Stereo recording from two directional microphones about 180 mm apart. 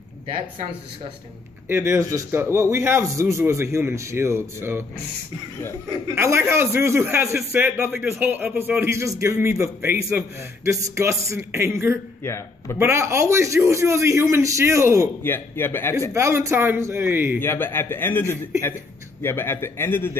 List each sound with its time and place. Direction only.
1.7 s a man's voice: 15° right (ahead or behind)
5.9 s a man's voice: 15° right (ahead or behind)
12.2 s a man's voice: 15° left (ahead or behind)
12.7 s a man's voice: 15° right (ahead or behind)
15.2 s a man's voice: 10° left (ahead or behind)
16.1 s a man's voice: 15° right (ahead or behind)
17.4 s a man's voice: 10° left (ahead or behind)